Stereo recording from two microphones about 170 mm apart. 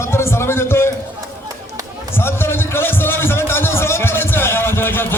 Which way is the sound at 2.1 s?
15° left (ahead or behind).